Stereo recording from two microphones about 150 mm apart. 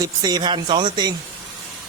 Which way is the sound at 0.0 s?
30° right (ahead or behind).